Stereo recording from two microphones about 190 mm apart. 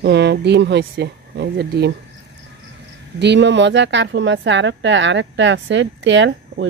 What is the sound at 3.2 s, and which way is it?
A woman's voice, 65° right (ahead or behind).